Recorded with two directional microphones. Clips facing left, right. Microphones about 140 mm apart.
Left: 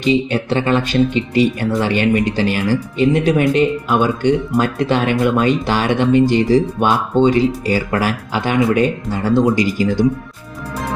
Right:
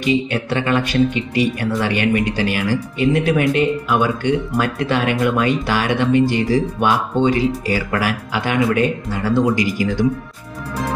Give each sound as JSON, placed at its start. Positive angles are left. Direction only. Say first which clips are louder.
{"t": 0.0, "sound": "speech", "louder": "left 3 dB", "side_deg": 25}